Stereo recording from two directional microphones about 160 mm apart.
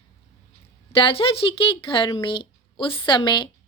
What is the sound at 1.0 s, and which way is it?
Speech, 35° left (ahead or behind).